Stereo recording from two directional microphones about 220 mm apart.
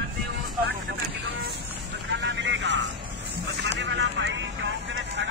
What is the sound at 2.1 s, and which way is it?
Vehicle, 55° right (ahead or behind).